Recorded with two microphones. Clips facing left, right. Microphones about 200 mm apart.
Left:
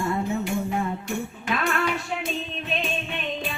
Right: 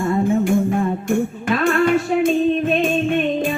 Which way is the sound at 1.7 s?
50° right (ahead or behind).